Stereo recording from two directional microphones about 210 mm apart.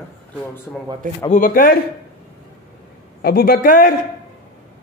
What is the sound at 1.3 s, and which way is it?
Speech, 40° left (ahead or behind).